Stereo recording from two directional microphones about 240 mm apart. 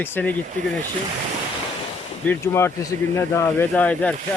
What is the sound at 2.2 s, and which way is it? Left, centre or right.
Speech, centre.